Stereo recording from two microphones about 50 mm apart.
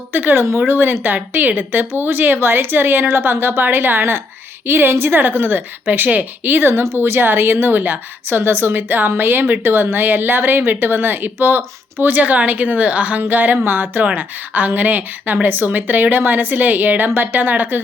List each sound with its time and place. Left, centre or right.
0.1 s a woman's voice: right